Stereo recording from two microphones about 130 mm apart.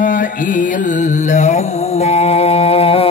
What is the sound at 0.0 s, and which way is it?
Carnatic music, 90° left.